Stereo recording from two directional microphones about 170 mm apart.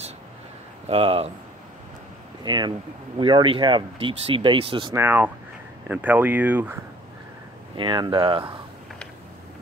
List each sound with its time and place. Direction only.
0.8 s speech: 35° right (ahead or behind)
2.4 s speech: 25° right (ahead or behind)
4.9 s speech: 10° right (ahead or behind)
7.7 s speech: 30° right (ahead or behind)